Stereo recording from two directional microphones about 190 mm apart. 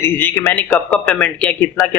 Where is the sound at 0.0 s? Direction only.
10° left (ahead or behind).